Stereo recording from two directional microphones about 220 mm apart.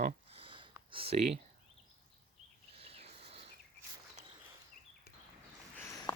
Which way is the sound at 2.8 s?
25° right (ahead or behind).